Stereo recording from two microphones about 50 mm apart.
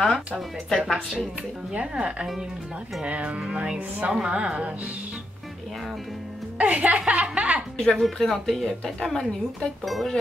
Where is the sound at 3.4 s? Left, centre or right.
Centre.